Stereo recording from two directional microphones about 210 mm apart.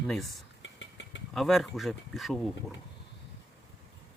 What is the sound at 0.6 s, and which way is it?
Vehicle, 60° left (ahead or behind).